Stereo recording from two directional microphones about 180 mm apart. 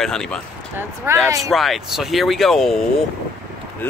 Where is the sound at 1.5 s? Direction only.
Centre (ahead or behind).